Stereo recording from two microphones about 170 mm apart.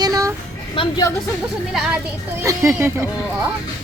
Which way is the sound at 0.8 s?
25° left (ahead or behind).